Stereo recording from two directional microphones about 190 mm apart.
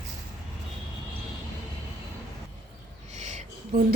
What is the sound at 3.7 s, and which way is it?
Speech, 50° right (ahead or behind).